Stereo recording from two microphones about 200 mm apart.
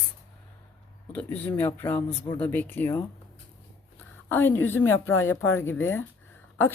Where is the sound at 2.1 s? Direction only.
25° left (ahead or behind).